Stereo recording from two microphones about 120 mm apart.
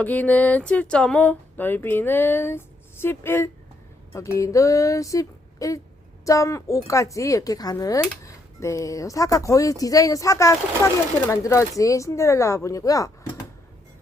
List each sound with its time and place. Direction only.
0.0 s speech: 15° left (ahead or behind)